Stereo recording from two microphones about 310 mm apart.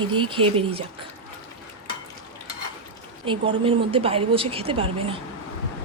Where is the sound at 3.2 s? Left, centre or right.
Centre.